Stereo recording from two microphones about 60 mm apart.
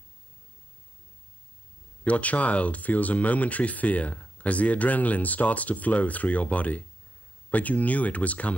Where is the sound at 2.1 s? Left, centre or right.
Left.